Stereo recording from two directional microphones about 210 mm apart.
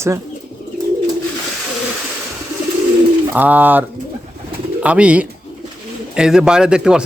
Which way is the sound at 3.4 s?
10° right (ahead or behind).